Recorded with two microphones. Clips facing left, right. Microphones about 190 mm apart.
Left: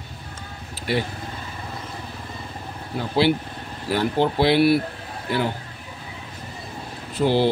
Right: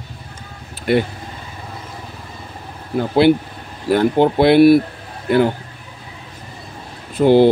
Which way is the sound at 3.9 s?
55° right (ahead or behind).